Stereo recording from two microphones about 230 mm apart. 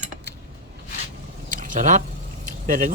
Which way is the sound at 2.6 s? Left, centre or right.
Right.